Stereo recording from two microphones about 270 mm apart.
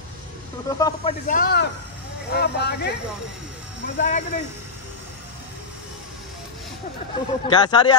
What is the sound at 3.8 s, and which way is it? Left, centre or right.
Speech, left.